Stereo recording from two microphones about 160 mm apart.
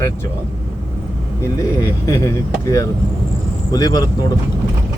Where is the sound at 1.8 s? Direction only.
20° left (ahead or behind).